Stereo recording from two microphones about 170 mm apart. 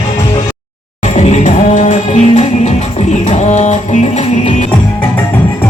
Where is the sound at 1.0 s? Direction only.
40° left (ahead or behind).